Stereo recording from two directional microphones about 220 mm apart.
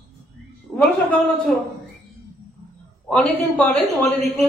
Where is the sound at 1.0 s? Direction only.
5° left (ahead or behind).